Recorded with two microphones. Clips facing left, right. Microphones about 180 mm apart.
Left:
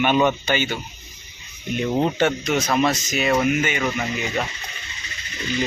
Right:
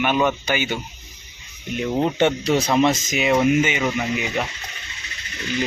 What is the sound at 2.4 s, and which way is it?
Speech, 30° right (ahead or behind).